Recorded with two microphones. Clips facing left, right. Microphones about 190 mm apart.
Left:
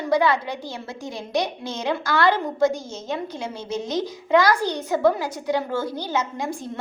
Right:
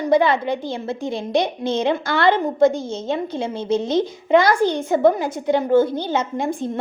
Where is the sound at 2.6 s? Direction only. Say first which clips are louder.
Right 5 dB; 55° right (ahead or behind).